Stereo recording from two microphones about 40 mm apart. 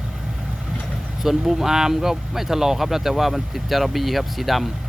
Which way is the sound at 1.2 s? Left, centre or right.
Centre.